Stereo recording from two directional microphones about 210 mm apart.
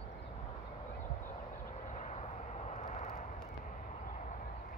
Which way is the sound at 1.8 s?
35° left (ahead or behind).